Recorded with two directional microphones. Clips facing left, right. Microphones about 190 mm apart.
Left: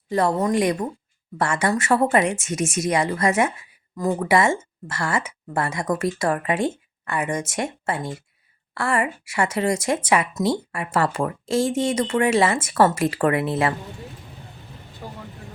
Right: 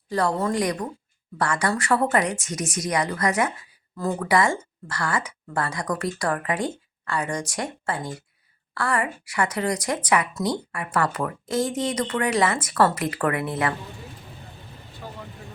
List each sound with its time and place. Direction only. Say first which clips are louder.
0.1 s a woman's voice: left 3 dB; 25° left (ahead or behind)